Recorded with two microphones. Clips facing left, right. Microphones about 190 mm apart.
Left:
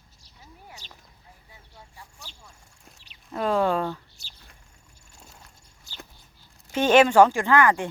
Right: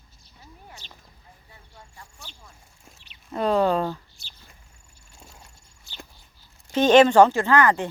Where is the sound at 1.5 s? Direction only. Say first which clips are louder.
Right 1 dB; 10° left (ahead or behind).